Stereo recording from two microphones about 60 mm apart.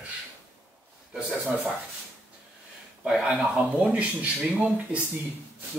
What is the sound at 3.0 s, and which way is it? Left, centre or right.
Speech, centre.